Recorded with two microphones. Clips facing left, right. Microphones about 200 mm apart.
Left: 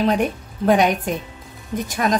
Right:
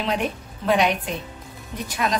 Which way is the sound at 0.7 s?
45° left (ahead or behind).